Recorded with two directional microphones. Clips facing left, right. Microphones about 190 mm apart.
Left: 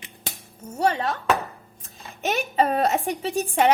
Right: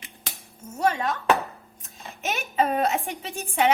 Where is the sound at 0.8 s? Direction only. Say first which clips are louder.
Left 1 dB; 30° left (ahead or behind).